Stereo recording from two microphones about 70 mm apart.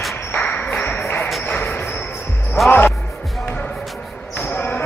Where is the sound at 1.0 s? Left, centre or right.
Left.